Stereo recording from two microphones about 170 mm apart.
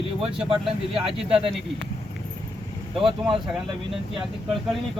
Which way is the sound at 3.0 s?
30° right (ahead or behind).